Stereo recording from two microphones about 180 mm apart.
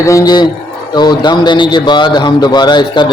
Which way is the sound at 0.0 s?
15° left (ahead or behind).